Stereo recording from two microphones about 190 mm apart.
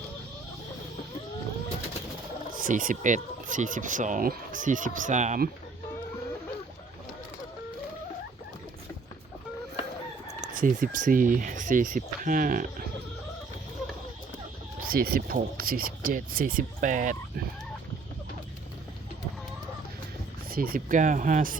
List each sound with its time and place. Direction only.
2.5 s speech: 45° right (ahead or behind)
10.4 s speech: 45° right (ahead or behind)
14.8 s speech: 50° right (ahead or behind)
20.5 s speech: 50° right (ahead or behind)